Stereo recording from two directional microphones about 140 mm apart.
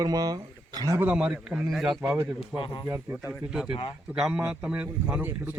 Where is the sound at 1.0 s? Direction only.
10° right (ahead or behind).